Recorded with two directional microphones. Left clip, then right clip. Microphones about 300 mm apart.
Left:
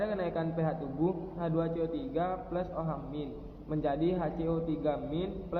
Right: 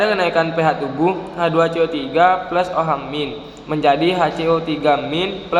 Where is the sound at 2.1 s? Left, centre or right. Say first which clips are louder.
Right 19 dB; right.